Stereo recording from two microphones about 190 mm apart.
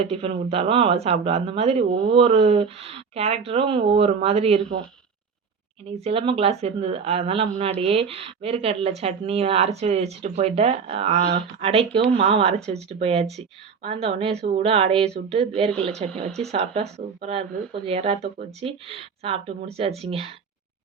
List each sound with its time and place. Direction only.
0.0 s speech: 30° right (ahead or behind)
5.9 s speech: 30° right (ahead or behind)